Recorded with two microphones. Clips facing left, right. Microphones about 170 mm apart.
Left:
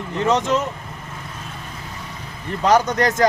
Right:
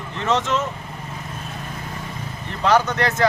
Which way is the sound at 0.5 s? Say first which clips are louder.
Left 2 dB; 40° left (ahead or behind).